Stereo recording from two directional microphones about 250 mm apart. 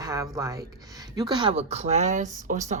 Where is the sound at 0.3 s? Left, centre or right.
Centre.